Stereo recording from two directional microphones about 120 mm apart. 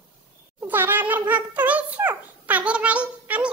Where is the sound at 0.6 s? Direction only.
15° right (ahead or behind).